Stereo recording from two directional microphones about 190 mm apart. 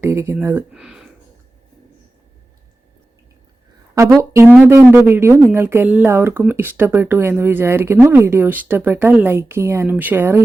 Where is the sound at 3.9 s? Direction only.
15° right (ahead or behind).